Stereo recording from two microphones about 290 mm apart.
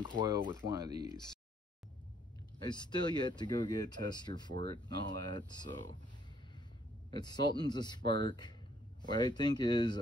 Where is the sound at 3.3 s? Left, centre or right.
Centre.